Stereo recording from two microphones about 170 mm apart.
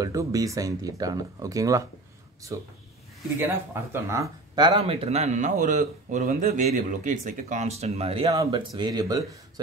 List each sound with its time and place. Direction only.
0.0 s speech: 20° right (ahead or behind)
3.3 s speech: 15° right (ahead or behind); by 8.3 s 35° right (ahead or behind)
8.3 s speech: 25° right (ahead or behind)